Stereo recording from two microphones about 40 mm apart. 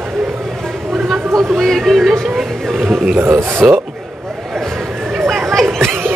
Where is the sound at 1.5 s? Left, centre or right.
Centre.